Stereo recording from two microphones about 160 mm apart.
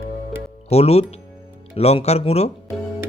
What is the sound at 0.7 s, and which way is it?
Speech, 40° left (ahead or behind).